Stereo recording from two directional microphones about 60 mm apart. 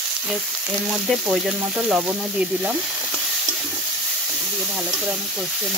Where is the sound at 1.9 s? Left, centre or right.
Centre.